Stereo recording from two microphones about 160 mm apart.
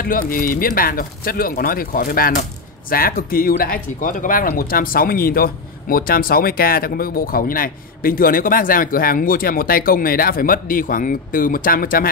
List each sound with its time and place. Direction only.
0.0 s speech: 65° left (ahead or behind)